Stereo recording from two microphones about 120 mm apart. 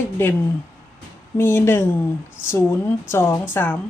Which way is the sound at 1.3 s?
20° left (ahead or behind).